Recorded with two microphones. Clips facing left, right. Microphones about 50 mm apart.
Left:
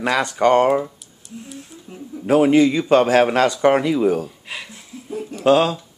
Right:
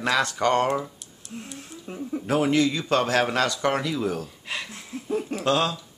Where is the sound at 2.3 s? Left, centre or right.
Centre.